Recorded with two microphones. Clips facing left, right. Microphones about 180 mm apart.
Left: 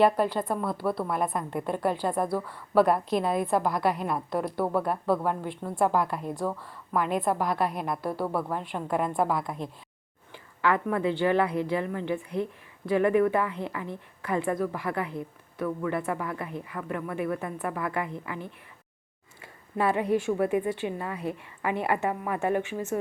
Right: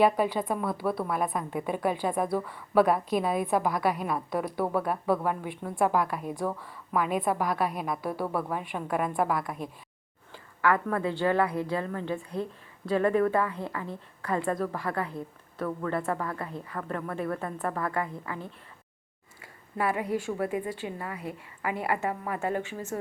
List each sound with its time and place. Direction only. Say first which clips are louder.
0.0 s a woman's voice: left 1 dB; 10° right (ahead or behind)
10.3 s a woman's voice: even; 20° left (ahead or behind)
19.7 s a woman's voice: left 4 dB; 25° left (ahead or behind)